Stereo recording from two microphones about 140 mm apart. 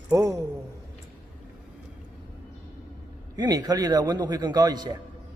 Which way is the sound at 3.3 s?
30° right (ahead or behind).